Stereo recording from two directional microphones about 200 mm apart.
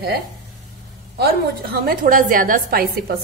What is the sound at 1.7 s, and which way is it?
A woman's voice, 50° right (ahead or behind).